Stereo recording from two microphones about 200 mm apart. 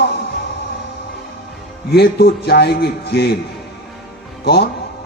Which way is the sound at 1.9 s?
55° left (ahead or behind).